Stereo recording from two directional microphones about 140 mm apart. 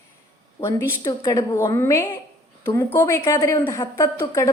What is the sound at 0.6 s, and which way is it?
A woman's voice, 35° left (ahead or behind).